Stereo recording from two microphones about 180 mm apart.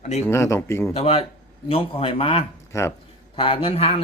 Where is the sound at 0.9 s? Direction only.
35° left (ahead or behind).